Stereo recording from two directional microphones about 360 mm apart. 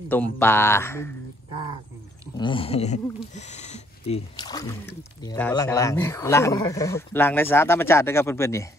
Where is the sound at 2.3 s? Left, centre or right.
Centre.